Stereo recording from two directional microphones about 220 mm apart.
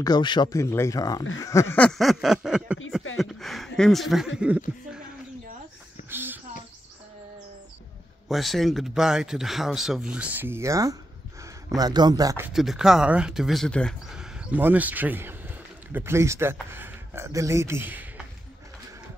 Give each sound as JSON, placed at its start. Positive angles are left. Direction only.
{"t": 0.0, "sound": "speech", "side_deg": 20}
{"t": 6.0, "sound": "a sound", "side_deg": -10}
{"t": 8.3, "sound": "speech", "side_deg": 0}